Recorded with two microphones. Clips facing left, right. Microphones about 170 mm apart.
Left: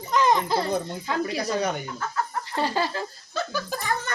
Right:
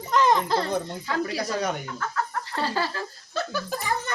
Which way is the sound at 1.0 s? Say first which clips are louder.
Left 1 dB; 20° left (ahead or behind).